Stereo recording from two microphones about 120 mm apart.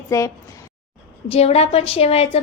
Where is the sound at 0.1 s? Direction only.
25° left (ahead or behind).